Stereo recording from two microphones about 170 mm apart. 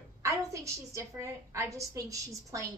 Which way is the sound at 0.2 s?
20° right (ahead or behind).